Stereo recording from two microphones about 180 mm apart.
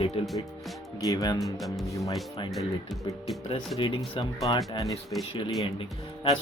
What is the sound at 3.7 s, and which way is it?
Speech, 25° left (ahead or behind).